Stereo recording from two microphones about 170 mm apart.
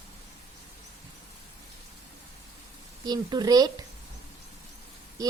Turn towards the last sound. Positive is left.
turn(degrees=-20)  # may be behind; listen again after turning